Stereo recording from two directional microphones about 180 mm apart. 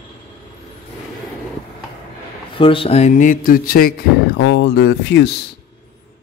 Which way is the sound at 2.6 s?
30° left (ahead or behind).